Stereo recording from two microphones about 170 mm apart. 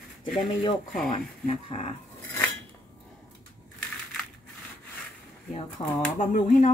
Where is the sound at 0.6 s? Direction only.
30° left (ahead or behind).